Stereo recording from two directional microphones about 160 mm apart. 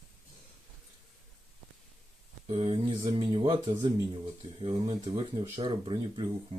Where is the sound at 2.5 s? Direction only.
35° right (ahead or behind).